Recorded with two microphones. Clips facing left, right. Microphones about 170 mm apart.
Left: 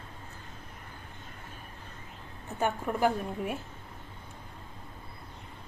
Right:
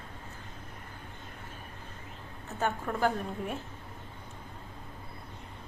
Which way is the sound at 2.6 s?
15° left (ahead or behind).